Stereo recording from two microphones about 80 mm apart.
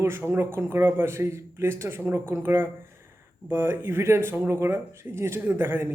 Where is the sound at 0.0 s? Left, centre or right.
Right.